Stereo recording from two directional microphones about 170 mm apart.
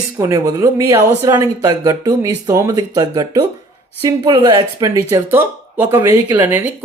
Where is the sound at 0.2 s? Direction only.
15° right (ahead or behind).